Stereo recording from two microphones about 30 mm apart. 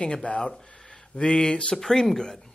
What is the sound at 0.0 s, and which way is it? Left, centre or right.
A man's voice, left.